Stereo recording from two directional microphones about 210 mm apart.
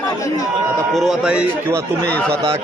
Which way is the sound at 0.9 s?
Centre (ahead or behind).